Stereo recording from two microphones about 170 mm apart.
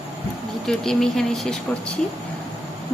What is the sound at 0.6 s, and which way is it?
A woman's voice, 5° left (ahead or behind).